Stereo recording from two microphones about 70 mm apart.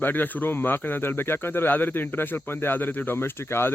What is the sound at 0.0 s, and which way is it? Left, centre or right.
Speech, left.